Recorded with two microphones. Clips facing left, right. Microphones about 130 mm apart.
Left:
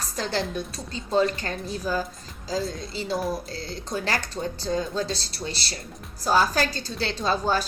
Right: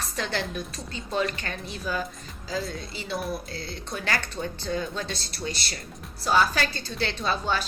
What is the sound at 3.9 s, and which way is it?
A woman's voice, 35° left (ahead or behind).